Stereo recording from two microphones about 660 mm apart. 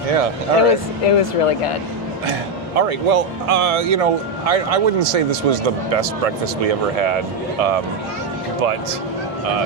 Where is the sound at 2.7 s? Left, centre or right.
Right.